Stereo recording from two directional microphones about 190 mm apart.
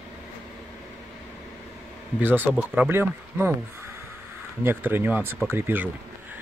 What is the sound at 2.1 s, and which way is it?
Speech, 10° right (ahead or behind).